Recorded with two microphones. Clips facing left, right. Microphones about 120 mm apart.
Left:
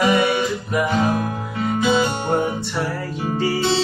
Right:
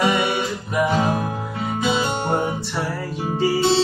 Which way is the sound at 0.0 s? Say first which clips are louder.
Left 2 dB; 15° right (ahead or behind).